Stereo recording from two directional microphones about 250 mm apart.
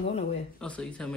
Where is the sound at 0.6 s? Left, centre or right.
Centre.